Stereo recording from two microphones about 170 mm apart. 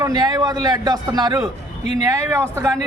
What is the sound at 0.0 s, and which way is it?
A man's voice, 20° right (ahead or behind).